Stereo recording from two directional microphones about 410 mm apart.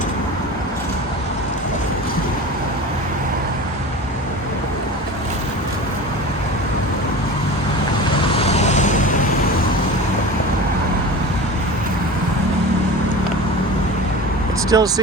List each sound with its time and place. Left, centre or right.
8.4 s vehicle: centre
14.7 s speech: centre